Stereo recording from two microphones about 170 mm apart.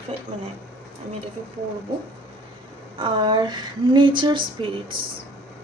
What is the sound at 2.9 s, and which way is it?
A woman's voice, 30° right (ahead or behind).